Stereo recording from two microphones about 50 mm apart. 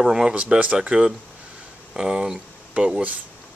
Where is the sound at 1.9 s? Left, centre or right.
Centre.